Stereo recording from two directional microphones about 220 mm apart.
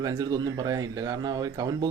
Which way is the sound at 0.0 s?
15° right (ahead or behind).